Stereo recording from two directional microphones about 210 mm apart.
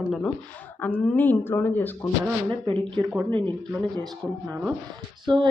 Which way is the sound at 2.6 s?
25° right (ahead or behind).